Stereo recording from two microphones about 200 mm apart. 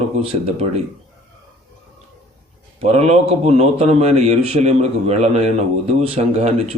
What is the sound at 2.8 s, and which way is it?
A man's voice, 30° right (ahead or behind).